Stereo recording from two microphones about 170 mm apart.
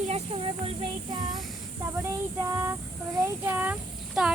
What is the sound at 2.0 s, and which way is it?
Child singing, 20° right (ahead or behind).